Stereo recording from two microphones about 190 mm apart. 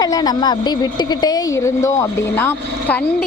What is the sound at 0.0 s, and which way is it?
A woman's voice, 20° left (ahead or behind).